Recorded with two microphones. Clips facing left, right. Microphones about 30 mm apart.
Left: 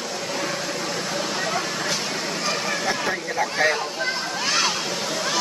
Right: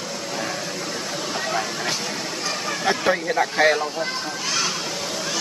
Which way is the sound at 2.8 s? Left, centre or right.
Centre.